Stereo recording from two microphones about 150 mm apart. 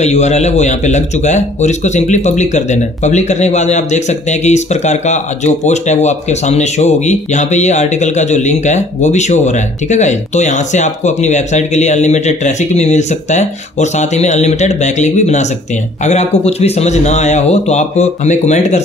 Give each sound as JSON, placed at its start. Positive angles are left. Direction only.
{"t": 0.0, "sound": "speech", "side_deg": 45}